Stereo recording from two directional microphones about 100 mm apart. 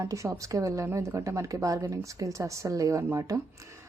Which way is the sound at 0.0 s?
35° right (ahead or behind).